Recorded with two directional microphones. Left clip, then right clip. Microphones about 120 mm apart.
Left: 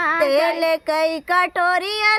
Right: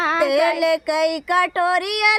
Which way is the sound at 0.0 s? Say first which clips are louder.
Even; 30° right (ahead or behind).